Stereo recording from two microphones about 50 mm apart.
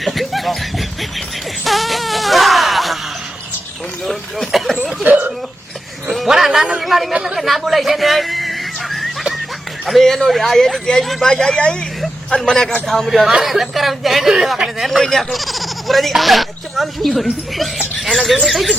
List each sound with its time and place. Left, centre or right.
0.0 s laughter: centre
1.6 s wail: centre
4.0 s a sound: centre
5.1 s speech: right
6.1 s a sound: centre
6.8 s speech: centre
7.1 s speech: centre
7.3 s a sound: centre
10.0 s speech: centre
11.3 s speech: centre